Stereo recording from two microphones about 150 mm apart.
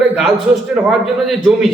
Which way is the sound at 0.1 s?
5° right (ahead or behind).